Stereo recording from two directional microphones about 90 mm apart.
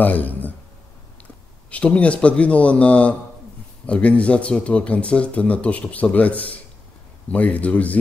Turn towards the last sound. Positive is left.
turn(degrees=15)  # may be behind; listen again after turning